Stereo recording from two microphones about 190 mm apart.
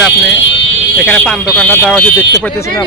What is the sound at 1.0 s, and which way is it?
Speech, 5° left (ahead or behind).